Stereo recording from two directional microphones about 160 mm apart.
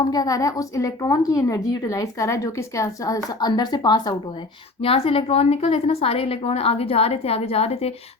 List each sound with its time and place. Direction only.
0.0 s a woman's voice: 25° left (ahead or behind); by 7.9 s 40° left (ahead or behind)